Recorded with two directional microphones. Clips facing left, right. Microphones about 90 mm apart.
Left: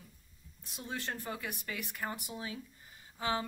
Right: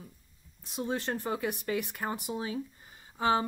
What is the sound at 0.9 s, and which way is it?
Speech, 25° right (ahead or behind).